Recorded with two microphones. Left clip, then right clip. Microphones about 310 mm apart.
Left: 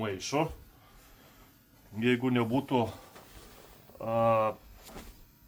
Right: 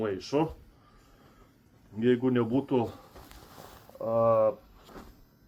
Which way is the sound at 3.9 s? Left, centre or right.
Left.